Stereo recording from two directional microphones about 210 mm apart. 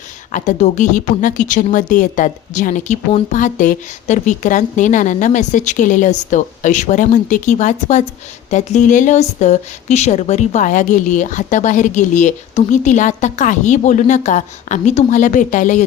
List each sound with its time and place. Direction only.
0.3 s speech: 35° left (ahead or behind)